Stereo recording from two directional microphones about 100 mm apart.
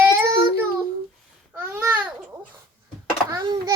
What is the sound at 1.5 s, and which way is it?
Babbling, 20° right (ahead or behind).